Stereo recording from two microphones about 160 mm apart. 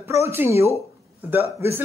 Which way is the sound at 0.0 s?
15° right (ahead or behind).